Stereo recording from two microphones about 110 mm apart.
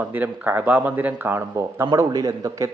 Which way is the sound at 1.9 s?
35° right (ahead or behind).